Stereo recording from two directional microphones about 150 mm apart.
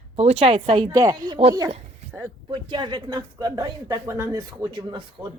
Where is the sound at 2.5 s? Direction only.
30° right (ahead or behind).